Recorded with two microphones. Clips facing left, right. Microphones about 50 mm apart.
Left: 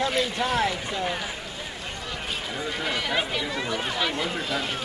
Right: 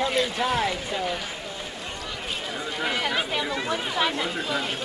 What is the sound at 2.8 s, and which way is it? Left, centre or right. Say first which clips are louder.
Speech: right 2 dB; centre.